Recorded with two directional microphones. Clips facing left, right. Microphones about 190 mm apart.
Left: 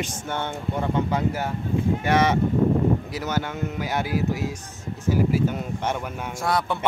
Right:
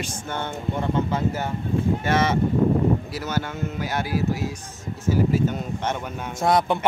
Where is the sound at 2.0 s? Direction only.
15° left (ahead or behind).